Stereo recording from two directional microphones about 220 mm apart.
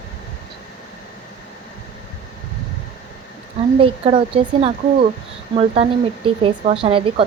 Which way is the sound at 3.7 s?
25° right (ahead or behind).